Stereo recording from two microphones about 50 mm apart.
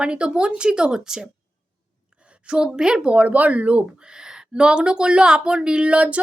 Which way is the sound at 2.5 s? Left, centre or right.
Centre.